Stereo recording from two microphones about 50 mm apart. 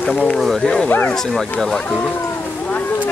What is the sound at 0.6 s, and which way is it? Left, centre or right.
Speech, centre.